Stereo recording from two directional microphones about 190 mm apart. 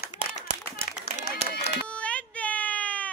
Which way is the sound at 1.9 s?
5° left (ahead or behind).